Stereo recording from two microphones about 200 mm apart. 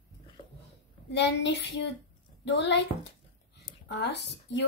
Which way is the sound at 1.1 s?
60° left (ahead or behind).